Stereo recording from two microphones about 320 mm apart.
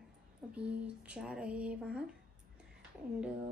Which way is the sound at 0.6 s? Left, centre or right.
Centre.